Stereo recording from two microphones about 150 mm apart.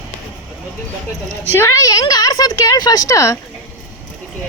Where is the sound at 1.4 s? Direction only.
15° left (ahead or behind).